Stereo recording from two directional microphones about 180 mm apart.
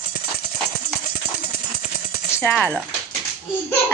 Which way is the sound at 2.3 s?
10° left (ahead or behind).